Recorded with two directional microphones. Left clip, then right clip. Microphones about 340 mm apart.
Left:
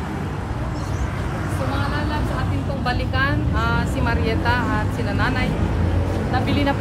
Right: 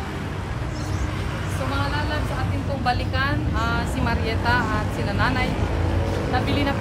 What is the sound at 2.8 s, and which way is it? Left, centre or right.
Speech, centre.